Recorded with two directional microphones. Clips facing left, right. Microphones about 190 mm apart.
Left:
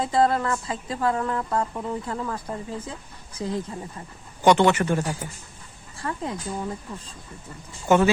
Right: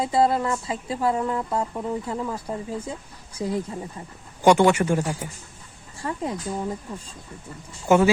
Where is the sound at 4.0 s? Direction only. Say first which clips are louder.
Right 1 dB; 10° right (ahead or behind).